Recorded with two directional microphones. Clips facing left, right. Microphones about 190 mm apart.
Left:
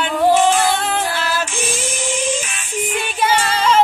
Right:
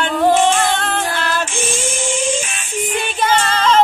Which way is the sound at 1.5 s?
25° right (ahead or behind).